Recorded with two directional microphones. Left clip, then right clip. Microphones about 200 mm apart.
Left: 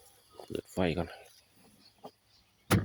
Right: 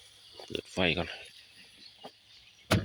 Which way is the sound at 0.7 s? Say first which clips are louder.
Right 3 dB; 15° left (ahead or behind).